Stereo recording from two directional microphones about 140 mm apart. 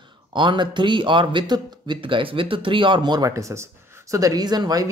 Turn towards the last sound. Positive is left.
turn(degrees=-30)  # may be behind; listen again after turning